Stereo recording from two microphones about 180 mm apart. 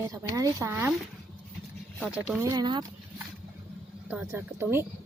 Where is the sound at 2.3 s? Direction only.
15° right (ahead or behind).